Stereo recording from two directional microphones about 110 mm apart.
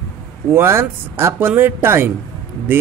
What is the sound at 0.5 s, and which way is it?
Speech, 25° right (ahead or behind).